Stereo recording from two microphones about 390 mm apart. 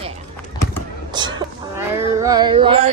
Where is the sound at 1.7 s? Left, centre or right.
Centre.